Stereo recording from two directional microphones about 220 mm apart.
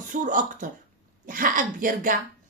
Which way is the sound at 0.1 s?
35° right (ahead or behind).